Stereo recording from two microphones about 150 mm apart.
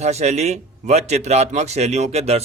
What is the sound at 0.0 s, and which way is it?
A man's voice, 45° right (ahead or behind).